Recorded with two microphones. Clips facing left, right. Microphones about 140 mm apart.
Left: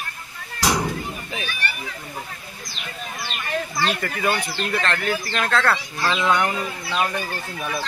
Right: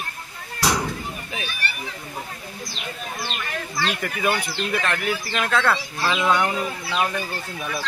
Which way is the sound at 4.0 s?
10° right (ahead or behind).